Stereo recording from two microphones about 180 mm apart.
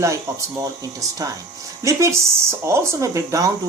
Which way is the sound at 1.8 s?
15° right (ahead or behind).